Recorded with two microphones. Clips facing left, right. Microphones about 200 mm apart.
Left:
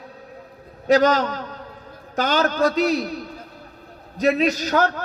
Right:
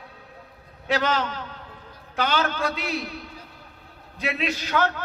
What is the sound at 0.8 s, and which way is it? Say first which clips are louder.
A man's voice: left 8 dB; 40° left (ahead or behind).